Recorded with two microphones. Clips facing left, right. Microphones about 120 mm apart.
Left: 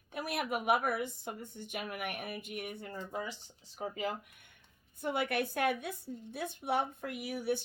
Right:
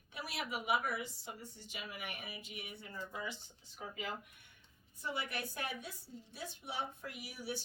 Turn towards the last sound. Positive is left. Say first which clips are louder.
# left 9 dB
turn(degrees=55)  # may be behind; listen again after turning